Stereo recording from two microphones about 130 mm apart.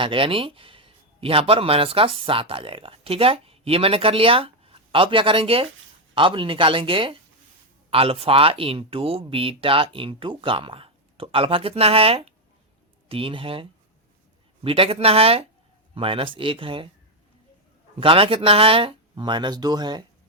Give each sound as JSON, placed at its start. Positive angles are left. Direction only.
{"t": 0.0, "sound": "speech", "side_deg": -40}
{"t": 18.0, "sound": "speech", "side_deg": -45}